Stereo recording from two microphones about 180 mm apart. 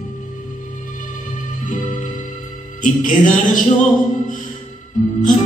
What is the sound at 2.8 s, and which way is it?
Speech, 45° left (ahead or behind).